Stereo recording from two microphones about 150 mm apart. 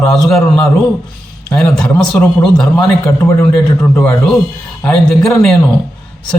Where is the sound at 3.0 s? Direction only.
15° left (ahead or behind).